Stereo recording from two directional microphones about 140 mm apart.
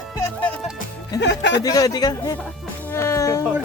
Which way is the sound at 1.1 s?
25° left (ahead or behind).